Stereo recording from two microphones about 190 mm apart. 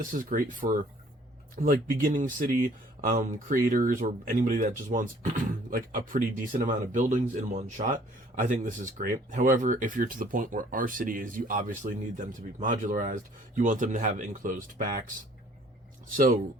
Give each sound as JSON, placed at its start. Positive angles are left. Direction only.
{"t": 0.0, "sound": "speech", "side_deg": -45}
{"t": 16.1, "sound": "speech", "side_deg": -45}